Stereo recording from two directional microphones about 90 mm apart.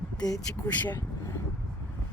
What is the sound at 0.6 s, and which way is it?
Speech, 20° left (ahead or behind).